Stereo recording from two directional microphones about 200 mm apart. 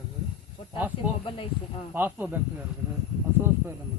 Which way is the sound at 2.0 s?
10° right (ahead or behind).